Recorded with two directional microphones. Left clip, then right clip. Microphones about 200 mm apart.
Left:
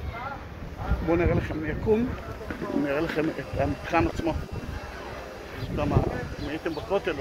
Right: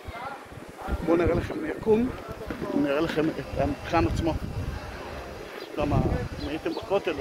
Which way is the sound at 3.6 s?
5° right (ahead or behind).